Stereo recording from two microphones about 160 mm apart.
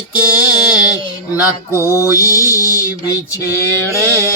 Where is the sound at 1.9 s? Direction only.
20° left (ahead or behind).